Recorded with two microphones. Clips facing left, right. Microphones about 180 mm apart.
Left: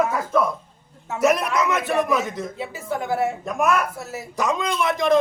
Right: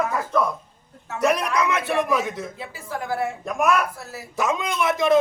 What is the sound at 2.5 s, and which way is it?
Speech, 20° left (ahead or behind).